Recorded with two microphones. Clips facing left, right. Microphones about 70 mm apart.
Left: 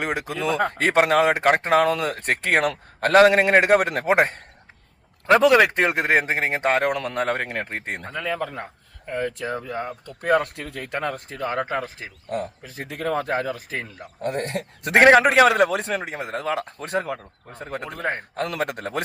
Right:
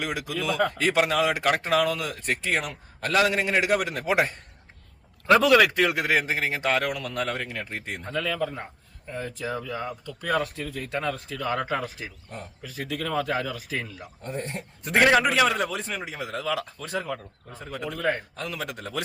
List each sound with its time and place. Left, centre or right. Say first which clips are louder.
0.0 s a man's voice: left 4 dB; left
5.2 s a man's voice: left 3 dB; left
8.1 s a man's voice: even; left
8.4 s a man's voice: even; left
14.2 s a man's voice: left 7 dB; left
15.0 s a man's voice: left 7 dB; left